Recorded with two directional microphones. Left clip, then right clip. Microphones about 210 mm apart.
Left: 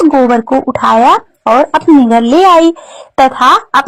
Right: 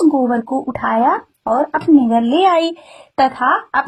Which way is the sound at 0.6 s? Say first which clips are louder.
Left 8 dB; 25° left (ahead or behind).